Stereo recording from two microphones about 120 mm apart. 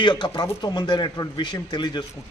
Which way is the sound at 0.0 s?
40° left (ahead or behind).